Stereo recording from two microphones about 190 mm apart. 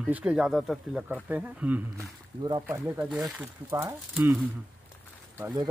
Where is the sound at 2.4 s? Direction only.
25° right (ahead or behind).